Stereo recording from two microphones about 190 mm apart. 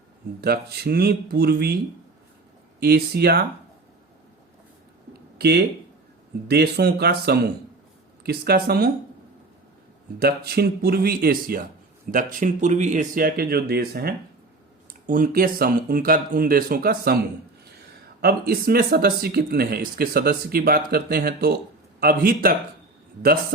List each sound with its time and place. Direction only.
0.4 s speech: 55° right (ahead or behind)
2.8 s speech: 55° right (ahead or behind)
5.4 s speech: 60° right (ahead or behind)
10.2 s speech: 55° right (ahead or behind)
18.2 s speech: 55° right (ahead or behind)